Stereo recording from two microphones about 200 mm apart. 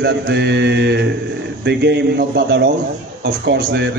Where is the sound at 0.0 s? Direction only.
55° right (ahead or behind).